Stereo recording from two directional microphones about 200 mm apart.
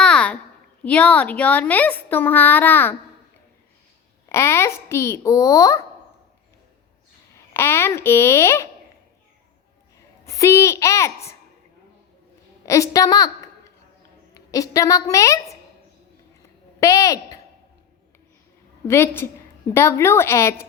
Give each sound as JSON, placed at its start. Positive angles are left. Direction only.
{"t": 0.0, "sound": "a sound", "side_deg": 5}
{"t": 0.9, "sound": "a woman's voice", "side_deg": 5}
{"t": 4.3, "sound": "a woman's voice", "side_deg": 15}
{"t": 7.5, "sound": "a woman's voice", "side_deg": 10}
{"t": 10.2, "sound": "a woman's voice", "side_deg": 15}
{"t": 12.6, "sound": "a woman's voice", "side_deg": 15}
{"t": 16.8, "sound": "a woman's voice", "side_deg": 15}
{"t": 18.9, "sound": "a woman's voice", "side_deg": 10}